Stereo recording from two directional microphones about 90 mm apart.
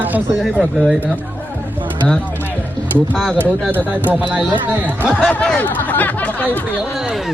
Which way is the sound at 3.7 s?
20° right (ahead or behind).